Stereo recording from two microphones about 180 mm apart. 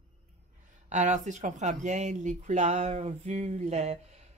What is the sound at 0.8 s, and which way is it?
Speech, 40° right (ahead or behind).